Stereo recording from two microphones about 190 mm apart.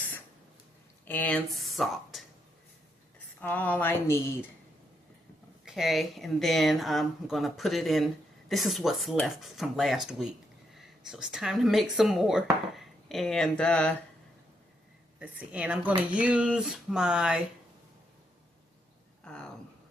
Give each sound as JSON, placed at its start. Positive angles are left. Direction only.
{"t": 1.0, "sound": "speech", "side_deg": 10}
{"t": 3.4, "sound": "speech", "side_deg": 10}
{"t": 5.6, "sound": "speech", "side_deg": 0}
{"t": 15.2, "sound": "a woman's voice", "side_deg": -5}
{"t": 19.2, "sound": "a sound", "side_deg": 5}